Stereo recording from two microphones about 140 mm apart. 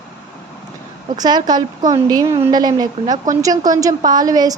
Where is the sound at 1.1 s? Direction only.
30° right (ahead or behind).